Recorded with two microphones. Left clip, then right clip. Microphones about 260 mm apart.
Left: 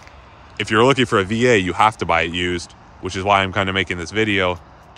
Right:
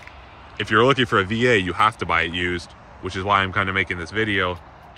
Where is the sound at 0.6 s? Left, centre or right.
Centre.